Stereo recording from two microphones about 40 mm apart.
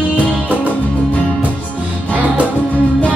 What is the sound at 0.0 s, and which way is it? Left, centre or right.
Music, left.